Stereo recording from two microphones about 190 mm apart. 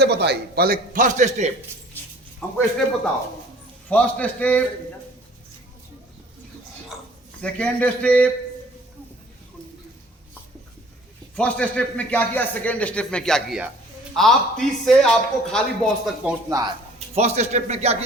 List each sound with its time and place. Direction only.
0.0 s a man's voice: 60° right (ahead or behind); by 1.5 s 35° right (ahead or behind)
3.8 s a man's voice: 5° left (ahead or behind)
7.4 s a man's voice: 5° left (ahead or behind)
11.3 s a man's voice: 5° left (ahead or behind)
16.2 s speech: 20° right (ahead or behind)
17.2 s speech: 35° right (ahead or behind)